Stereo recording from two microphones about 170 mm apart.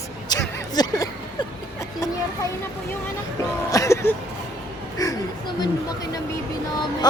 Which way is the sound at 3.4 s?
20° left (ahead or behind).